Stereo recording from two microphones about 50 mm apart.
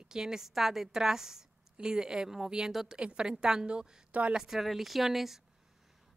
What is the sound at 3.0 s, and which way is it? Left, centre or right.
A woman's voice, centre.